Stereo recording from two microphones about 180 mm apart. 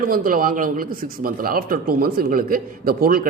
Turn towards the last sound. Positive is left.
turn(degrees=-55)  # may be behind; listen again after turning